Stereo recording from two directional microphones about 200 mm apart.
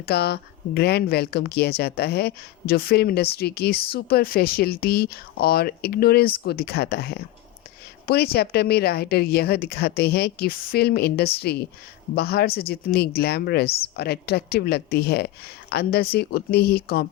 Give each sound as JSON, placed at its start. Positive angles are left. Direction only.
{"t": 0.0, "sound": "speech", "side_deg": 55}